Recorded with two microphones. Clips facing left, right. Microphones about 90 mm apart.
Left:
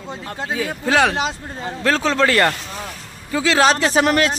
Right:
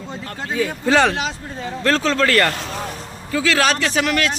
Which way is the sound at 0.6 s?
5° left (ahead or behind).